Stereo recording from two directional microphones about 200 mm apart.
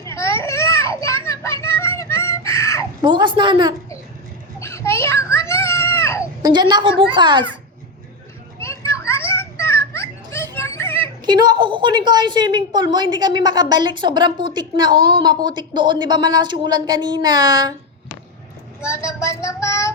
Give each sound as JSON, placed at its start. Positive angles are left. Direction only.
{"t": 0.0, "sound": "children playing", "side_deg": 15}
{"t": 3.0, "sound": "a woman's voice", "side_deg": -20}
{"t": 4.6, "sound": "a sound", "side_deg": 15}
{"t": 6.4, "sound": "a woman's voice", "side_deg": -20}
{"t": 8.6, "sound": "children playing", "side_deg": 15}
{"t": 11.3, "sound": "a woman's voice", "side_deg": -20}
{"t": 18.9, "sound": "child singing", "side_deg": 15}